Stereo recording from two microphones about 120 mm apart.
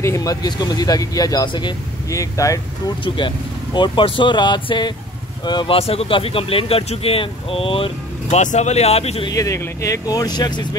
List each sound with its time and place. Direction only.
0.0 s speech: 25° left (ahead or behind)
2.1 s speech: 25° left (ahead or behind)
3.0 s speech: 40° left (ahead or behind)
5.8 s speech: 55° left (ahead or behind)
8.4 s speech: 80° left; by 9.2 s 60° left (ahead or behind)
9.3 s speech: 25° left (ahead or behind)